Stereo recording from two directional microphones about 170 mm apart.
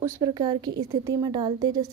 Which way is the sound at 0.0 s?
20° right (ahead or behind).